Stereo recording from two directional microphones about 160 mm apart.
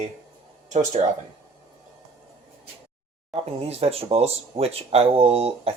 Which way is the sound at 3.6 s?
40° right (ahead or behind).